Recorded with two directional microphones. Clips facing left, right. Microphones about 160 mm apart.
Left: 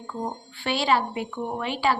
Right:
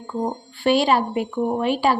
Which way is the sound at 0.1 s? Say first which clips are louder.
Right 6 dB; 30° right (ahead or behind).